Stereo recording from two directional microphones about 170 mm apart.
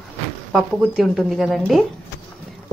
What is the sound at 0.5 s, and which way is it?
Speech, centre (ahead or behind).